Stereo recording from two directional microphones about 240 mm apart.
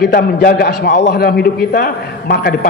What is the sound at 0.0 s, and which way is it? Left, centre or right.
A man's voice, left.